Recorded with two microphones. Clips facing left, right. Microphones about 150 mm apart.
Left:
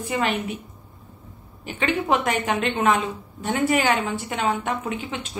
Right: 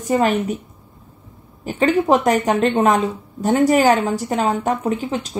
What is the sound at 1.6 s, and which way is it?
A woman's voice, 40° right (ahead or behind).